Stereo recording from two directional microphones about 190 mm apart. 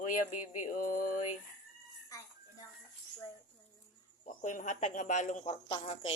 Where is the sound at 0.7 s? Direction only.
45° left (ahead or behind).